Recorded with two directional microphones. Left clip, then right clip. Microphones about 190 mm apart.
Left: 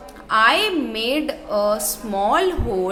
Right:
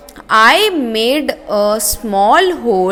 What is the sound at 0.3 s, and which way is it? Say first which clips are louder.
A woman's voice: right 7 dB; 35° right (ahead or behind).